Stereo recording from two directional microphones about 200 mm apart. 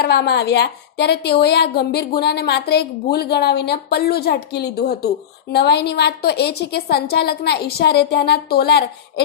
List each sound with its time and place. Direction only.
0.0 s a woman's voice: 55° left (ahead or behind)